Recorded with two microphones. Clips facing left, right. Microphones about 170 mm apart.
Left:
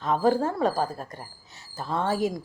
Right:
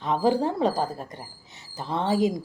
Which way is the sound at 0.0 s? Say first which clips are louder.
Even; 15° right (ahead or behind).